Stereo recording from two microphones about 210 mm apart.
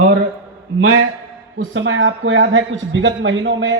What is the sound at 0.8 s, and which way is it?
A man's voice, 75° right (ahead or behind).